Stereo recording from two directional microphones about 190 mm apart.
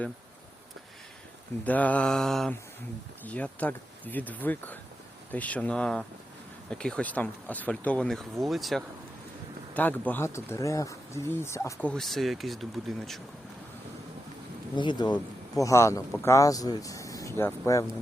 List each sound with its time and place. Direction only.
1.6 s speech: 10° left (ahead or behind)
14.8 s speech: 25° left (ahead or behind)